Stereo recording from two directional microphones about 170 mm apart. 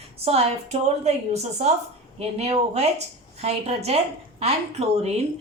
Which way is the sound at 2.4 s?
40° right (ahead or behind).